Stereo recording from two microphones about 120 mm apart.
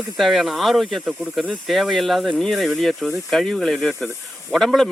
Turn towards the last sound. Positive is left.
turn(degrees=0)  # may be behind; listen again after turning